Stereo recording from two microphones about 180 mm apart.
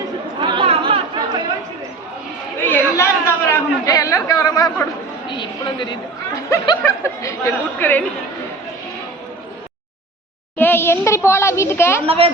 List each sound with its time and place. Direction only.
0.3 s chatter: 30° right (ahead or behind)
2.6 s a man's voice: 10° left (ahead or behind)
10.6 s speech: 10° left (ahead or behind)
12.0 s a woman's voice: 30° right (ahead or behind)